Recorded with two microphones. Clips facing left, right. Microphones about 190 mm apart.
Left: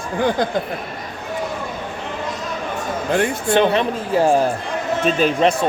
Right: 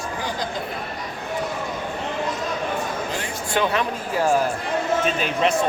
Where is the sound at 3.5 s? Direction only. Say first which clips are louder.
Left 5 dB; 25° left (ahead or behind).